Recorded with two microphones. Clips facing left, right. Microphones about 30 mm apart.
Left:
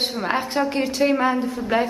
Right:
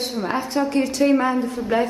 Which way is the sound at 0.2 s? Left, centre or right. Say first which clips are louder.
Right 1 dB; left.